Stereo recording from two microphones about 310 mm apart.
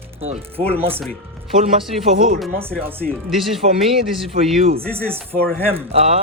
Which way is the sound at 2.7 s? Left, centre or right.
Centre.